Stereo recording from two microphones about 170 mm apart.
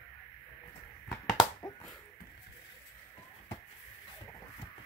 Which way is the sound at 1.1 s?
20° left (ahead or behind).